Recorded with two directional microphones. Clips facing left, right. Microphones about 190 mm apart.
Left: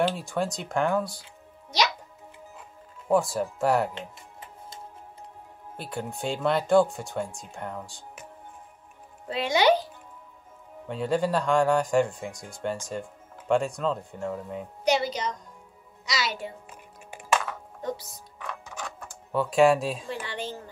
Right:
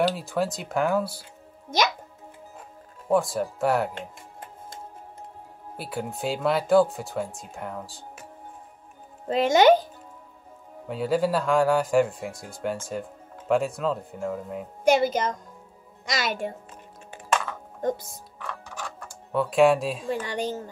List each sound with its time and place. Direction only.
0.1 s speech: 5° right (ahead or behind)
1.7 s a child's voice: 50° right (ahead or behind)
3.1 s speech: centre (ahead or behind)
3.9 s music: 50° right (ahead or behind)
5.8 s speech: 5° right (ahead or behind)
9.3 s a child's voice: 45° right (ahead or behind)
10.9 s speech: 5° right (ahead or behind)
14.9 s a child's voice: 50° right (ahead or behind)
17.1 s a sound: 10° left (ahead or behind)
17.8 s a child's voice: 50° right (ahead or behind)
18.4 s a sound: 15° left (ahead or behind)
18.9 s speech: centre (ahead or behind)
20.2 s a child's voice: 45° right (ahead or behind)